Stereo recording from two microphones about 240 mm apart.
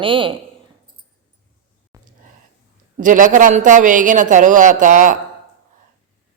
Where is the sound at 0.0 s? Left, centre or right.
Right.